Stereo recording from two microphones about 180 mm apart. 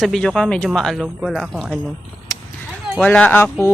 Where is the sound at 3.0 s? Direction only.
10° left (ahead or behind).